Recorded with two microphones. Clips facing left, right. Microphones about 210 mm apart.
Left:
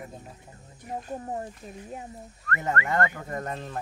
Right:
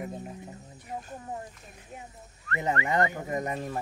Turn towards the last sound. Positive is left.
turn(degrees=-10)  # may be behind; listen again after turning